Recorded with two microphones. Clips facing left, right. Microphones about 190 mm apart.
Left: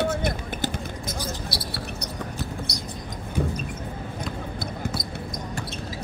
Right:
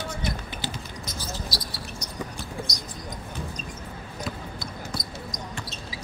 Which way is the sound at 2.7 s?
60° left (ahead or behind).